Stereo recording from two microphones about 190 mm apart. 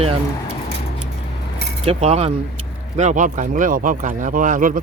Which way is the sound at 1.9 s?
35° right (ahead or behind).